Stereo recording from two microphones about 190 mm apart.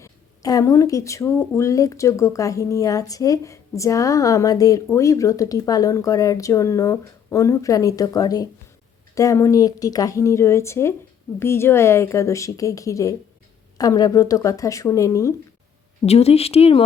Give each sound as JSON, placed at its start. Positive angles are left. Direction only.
{"t": 0.0, "sound": "speech", "side_deg": 15}
{"t": 16.0, "sound": "speech", "side_deg": 35}